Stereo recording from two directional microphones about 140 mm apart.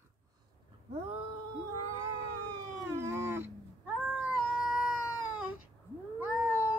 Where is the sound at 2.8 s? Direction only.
20° right (ahead or behind).